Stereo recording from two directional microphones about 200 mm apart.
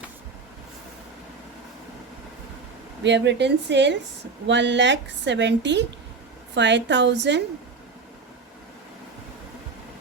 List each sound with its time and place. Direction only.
3.0 s a woman's voice: 60° right (ahead or behind)